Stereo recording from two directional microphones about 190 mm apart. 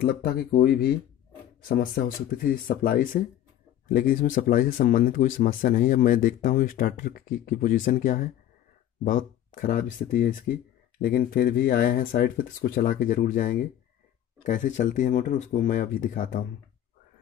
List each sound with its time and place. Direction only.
0.0 s speech: 50° left (ahead or behind)